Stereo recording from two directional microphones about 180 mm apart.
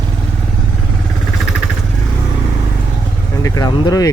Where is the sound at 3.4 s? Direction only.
20° left (ahead or behind).